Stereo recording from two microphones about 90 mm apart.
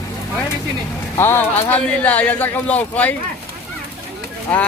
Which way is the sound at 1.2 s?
25° left (ahead or behind).